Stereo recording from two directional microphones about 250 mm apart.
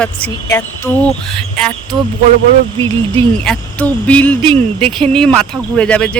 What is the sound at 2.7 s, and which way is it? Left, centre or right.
Speech, centre.